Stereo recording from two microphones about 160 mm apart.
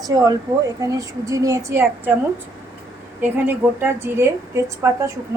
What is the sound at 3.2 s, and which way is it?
A woman's voice, 10° right (ahead or behind).